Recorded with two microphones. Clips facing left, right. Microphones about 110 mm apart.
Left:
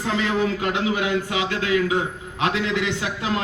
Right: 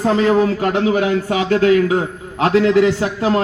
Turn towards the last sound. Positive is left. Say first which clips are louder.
# right 8 dB
turn(degrees=-40)  # may be behind; listen again after turning